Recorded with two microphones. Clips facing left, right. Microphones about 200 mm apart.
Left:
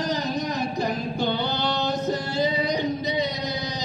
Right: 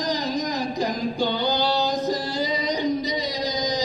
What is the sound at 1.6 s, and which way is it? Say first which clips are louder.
Singing: right 2 dB; 35° right (ahead or behind).